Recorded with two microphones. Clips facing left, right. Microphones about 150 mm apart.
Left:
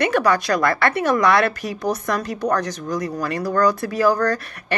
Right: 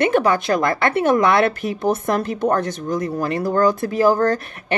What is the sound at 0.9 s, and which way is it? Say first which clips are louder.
A woman's voice: right 4 dB; 50° right (ahead or behind).